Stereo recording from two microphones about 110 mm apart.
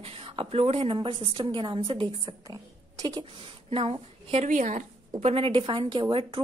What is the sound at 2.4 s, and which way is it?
A woman's voice, 35° right (ahead or behind).